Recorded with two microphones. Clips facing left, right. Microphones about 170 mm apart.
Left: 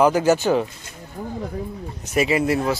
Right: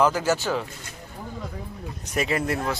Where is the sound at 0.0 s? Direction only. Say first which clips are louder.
Left 5 dB; 15° left (ahead or behind).